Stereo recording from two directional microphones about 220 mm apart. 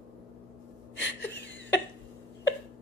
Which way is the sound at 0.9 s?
55° left (ahead or behind).